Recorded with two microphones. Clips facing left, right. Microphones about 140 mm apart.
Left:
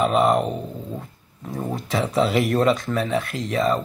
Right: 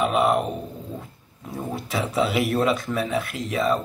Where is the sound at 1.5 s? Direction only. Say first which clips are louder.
Left 3 dB; 5° right (ahead or behind).